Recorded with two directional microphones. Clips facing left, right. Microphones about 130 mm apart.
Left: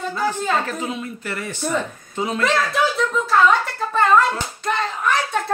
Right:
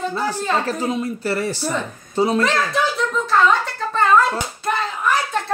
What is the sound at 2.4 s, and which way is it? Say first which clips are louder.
Speech: even; centre (ahead or behind).